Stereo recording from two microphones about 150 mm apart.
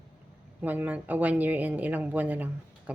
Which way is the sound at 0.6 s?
10° right (ahead or behind).